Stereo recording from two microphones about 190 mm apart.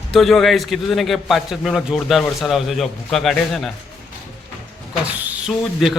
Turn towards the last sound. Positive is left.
turn(degrees=0)  # may be behind; listen again after turning